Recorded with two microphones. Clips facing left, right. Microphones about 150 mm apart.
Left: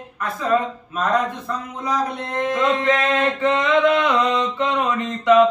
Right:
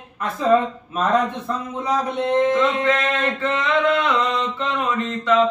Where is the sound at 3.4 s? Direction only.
15° left (ahead or behind).